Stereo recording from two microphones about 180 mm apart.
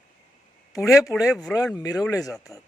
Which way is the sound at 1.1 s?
5° left (ahead or behind).